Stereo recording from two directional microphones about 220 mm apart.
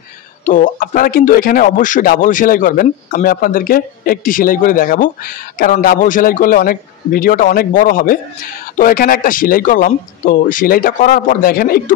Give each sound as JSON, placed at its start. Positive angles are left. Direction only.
{"t": 0.5, "sound": "speech", "side_deg": 40}